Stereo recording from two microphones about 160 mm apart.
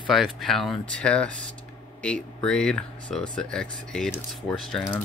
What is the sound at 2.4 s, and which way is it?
Speech, 5° left (ahead or behind).